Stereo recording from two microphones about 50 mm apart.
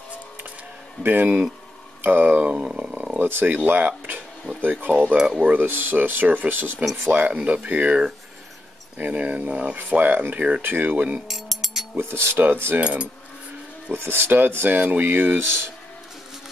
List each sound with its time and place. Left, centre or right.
1.0 s speech: right
2.5 s speech: right
3.2 s cutlery: right
3.5 s speech: right
5.7 s speech: right
9.0 s speech: right
9.8 s speech: right
10.6 s speech: right
11.2 s a sound: centre
12.0 s cutlery: right
12.8 s speech: right
13.9 s cutlery: right
14.7 s speech: right